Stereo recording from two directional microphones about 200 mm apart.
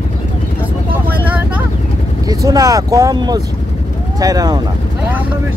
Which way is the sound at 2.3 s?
20° right (ahead or behind).